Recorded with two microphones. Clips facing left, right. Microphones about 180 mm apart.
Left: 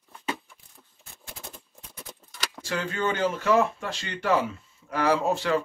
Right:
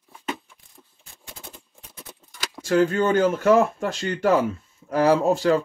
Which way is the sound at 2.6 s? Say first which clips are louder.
Right 9 dB; 45° right (ahead or behind).